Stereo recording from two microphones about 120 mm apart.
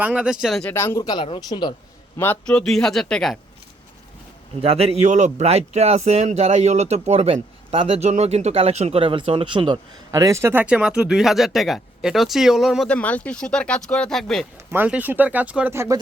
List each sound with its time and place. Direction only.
0.0 s speech: 10° right (ahead or behind)
0.7 s speech: 20° left (ahead or behind)
1.0 s a man's voice: 45° left (ahead or behind)
2.1 s speech: 15° left (ahead or behind)
4.6 s a man's voice: 55° right (ahead or behind)
10.1 s speech: 30° right (ahead or behind); by 12.9 s 5° right (ahead or behind)
12.9 s speech: 10° left (ahead or behind)
14.7 s speech: 15° right (ahead or behind)